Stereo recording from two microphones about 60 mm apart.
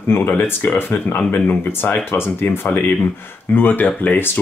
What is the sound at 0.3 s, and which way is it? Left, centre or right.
Speech, left.